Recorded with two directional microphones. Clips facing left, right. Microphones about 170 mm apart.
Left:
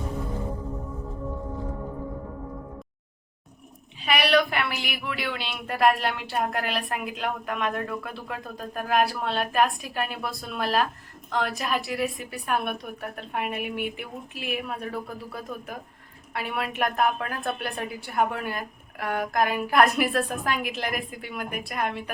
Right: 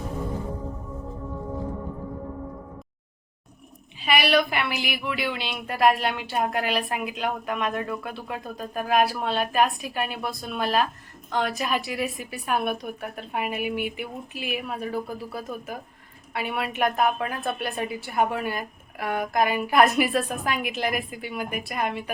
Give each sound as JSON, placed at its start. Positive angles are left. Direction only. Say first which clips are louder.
{"t": 4.0, "sound": "speech", "louder": "even", "side_deg": 0}